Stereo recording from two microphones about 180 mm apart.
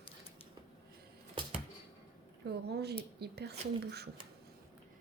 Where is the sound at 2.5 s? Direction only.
65° right (ahead or behind).